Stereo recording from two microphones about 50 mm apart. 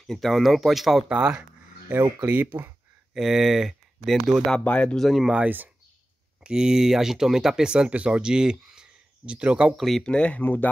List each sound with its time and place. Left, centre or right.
0.0 s speech: centre
1.0 s speech: centre
2.2 s speech: right
3.2 s speech: centre
4.6 s speech: left
4.9 s speech: centre
5.3 s speech: right
6.4 s speech: centre
7.9 s speech: right
8.2 s speech: centre
9.8 s speech: centre
10.0 s speech: centre
10.3 s speech: left